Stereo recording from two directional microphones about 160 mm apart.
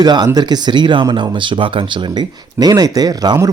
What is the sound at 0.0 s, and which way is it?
Speech, 25° right (ahead or behind).